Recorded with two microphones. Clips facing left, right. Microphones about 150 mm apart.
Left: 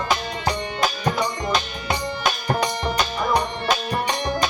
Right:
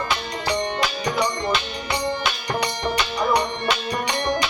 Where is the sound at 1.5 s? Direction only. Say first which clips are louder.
Left 1 dB; 45° left (ahead or behind).